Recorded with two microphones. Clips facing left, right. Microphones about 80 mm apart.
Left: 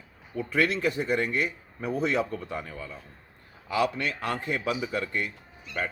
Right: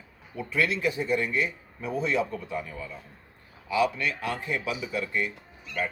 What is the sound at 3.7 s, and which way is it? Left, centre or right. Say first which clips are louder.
A man's voice: right 1 dB; left.